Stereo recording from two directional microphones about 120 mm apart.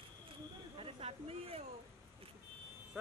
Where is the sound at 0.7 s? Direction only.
50° right (ahead or behind).